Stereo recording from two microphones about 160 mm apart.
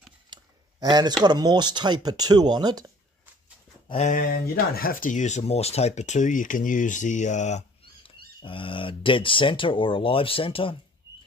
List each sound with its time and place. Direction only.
0.3 s a sound: 25° right (ahead or behind)
1.2 s speech: 25° right (ahead or behind)
3.9 s speech: 45° left (ahead or behind)
4.2 s speech: 70° left (ahead or behind); by 8.1 s 45° left (ahead or behind)
8.4 s speech: 35° left (ahead or behind)